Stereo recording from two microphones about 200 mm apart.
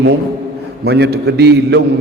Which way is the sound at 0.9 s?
55° right (ahead or behind).